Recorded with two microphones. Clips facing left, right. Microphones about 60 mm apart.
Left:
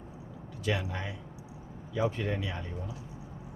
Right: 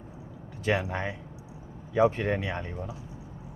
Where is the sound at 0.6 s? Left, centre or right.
Right.